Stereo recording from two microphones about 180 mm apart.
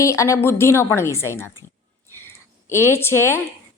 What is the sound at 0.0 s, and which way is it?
A woman's voice, 15° left (ahead or behind).